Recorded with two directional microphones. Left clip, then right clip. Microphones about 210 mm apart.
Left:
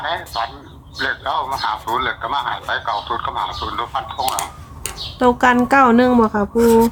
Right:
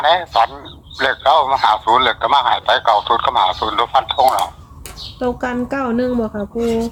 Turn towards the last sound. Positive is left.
turn(degrees=25)  # may be behind; listen again after turning